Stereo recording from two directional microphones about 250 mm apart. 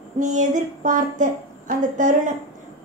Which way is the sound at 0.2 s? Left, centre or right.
Right.